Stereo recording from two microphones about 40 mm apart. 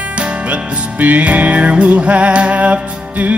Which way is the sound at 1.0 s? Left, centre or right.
Right.